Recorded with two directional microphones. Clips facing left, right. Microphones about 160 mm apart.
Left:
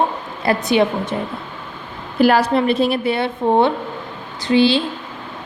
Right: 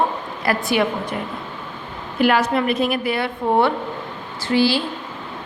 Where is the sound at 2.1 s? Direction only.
35° left (ahead or behind).